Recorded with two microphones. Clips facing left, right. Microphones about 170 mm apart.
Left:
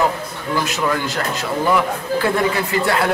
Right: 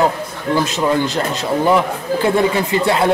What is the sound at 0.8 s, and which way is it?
Speech, 25° right (ahead or behind).